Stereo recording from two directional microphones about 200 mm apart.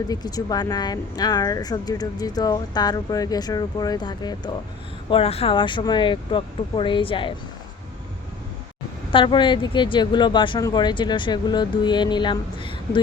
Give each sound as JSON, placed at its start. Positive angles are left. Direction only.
{"t": 0.1, "sound": "speech", "side_deg": 20}
{"t": 9.1, "sound": "speech", "side_deg": 25}